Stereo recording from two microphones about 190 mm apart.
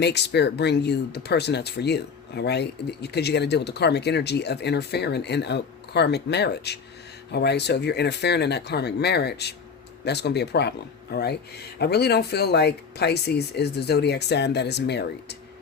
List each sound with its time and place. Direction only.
0.0 s speech: 65° left (ahead or behind)